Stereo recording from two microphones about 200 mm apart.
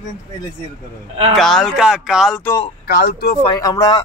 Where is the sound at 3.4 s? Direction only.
20° left (ahead or behind).